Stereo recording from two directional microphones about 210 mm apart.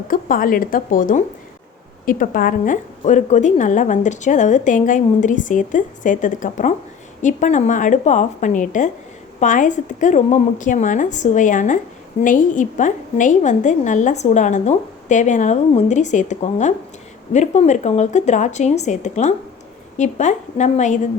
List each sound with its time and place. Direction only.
0.1 s a woman's voice: 40° left (ahead or behind)